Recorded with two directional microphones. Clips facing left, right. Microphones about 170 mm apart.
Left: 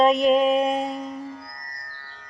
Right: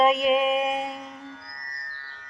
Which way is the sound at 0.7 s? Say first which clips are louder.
Left 5 dB; 40° left (ahead or behind).